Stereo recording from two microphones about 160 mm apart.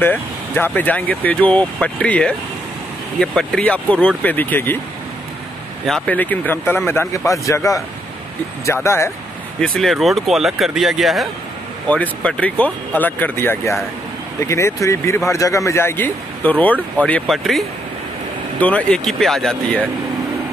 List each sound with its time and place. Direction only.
0.0 s speech: 10° left (ahead or behind)
5.9 s a man's voice: 5° left (ahead or behind)
8.8 s speech: 15° left (ahead or behind)
9.6 s speech: centre (ahead or behind)